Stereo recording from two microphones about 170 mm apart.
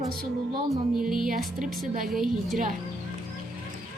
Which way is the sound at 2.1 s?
Centre (ahead or behind).